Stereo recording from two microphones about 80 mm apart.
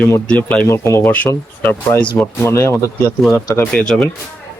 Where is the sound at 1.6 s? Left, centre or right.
Left.